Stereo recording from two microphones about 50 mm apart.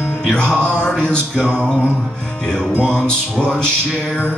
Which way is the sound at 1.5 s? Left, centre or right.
Centre.